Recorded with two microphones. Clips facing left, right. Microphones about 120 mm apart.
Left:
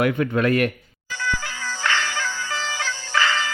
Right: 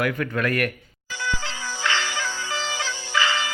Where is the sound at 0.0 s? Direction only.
25° left (ahead or behind).